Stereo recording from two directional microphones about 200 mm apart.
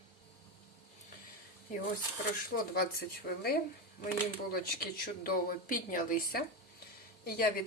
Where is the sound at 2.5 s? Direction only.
70° left (ahead or behind).